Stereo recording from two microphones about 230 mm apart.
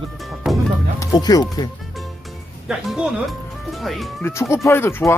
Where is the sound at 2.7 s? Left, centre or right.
Centre.